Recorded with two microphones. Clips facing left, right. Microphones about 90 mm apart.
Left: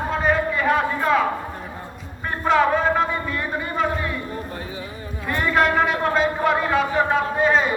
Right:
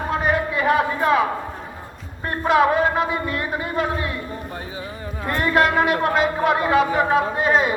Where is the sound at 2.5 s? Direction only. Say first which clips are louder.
Right 1 dB; 5° right (ahead or behind).